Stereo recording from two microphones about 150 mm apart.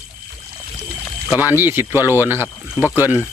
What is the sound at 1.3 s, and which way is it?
Speech, 10° right (ahead or behind).